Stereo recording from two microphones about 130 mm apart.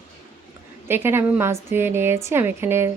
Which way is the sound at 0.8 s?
15° right (ahead or behind).